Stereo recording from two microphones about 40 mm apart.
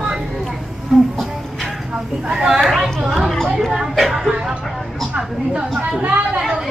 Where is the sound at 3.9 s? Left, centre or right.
Centre.